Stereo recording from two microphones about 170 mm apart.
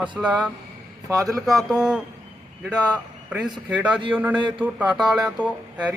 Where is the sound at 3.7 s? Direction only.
5° right (ahead or behind).